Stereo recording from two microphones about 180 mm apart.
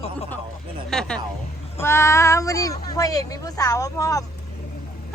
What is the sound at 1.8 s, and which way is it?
Speech, 15° left (ahead or behind).